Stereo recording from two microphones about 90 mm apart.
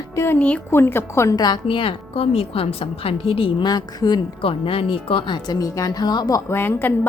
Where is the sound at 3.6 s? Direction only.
50° left (ahead or behind).